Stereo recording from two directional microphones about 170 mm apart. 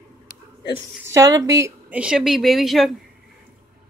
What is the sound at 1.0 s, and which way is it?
Speech, 20° right (ahead or behind).